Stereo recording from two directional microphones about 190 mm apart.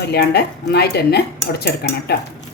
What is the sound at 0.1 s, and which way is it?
Speech, 55° left (ahead or behind).